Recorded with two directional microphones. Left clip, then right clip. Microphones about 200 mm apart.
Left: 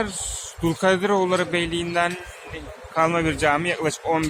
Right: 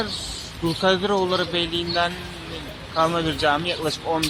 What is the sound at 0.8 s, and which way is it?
Speech, 15° left (ahead or behind).